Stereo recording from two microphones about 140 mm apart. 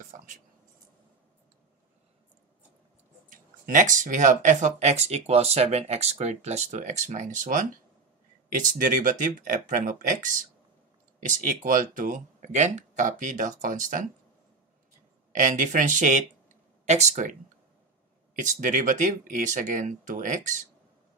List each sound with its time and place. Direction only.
0.0 s a sound: 70° right (ahead or behind)
3.3 s speech: 70° right (ahead or behind)
8.7 s speech: 75° right (ahead or behind)
15.3 s speech: 65° right (ahead or behind)
18.4 s speech: 65° right (ahead or behind)